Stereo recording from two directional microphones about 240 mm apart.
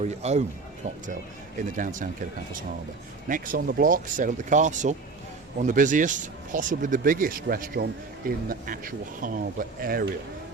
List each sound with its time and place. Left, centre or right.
0.0 s speech: right
1.5 s speech: right
3.2 s speech: right